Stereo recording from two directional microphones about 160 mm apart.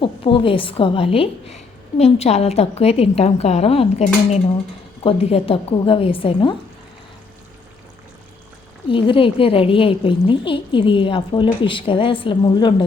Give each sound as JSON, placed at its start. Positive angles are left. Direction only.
{"t": 0.0, "sound": "a woman's voice", "side_deg": 35}
{"t": 8.9, "sound": "a woman's voice", "side_deg": 30}